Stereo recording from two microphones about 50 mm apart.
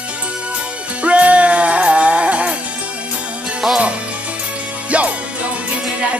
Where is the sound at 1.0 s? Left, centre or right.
Right.